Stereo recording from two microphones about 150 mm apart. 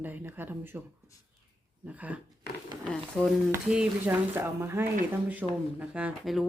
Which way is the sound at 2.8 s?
5° left (ahead or behind).